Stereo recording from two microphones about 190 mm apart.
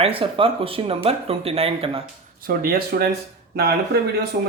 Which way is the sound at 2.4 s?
50° right (ahead or behind).